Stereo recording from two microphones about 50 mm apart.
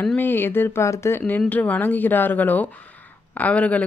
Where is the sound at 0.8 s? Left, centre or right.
Left.